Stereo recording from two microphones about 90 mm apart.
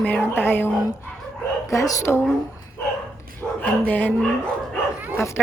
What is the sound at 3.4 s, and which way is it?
Bow-wow, 10° left (ahead or behind).